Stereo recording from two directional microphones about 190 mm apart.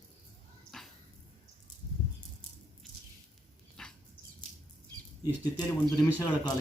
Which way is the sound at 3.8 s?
5° left (ahead or behind).